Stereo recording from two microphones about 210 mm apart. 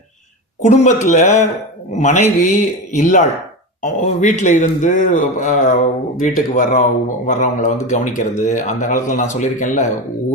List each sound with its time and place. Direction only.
0.6 s a man's voice: 35° left (ahead or behind)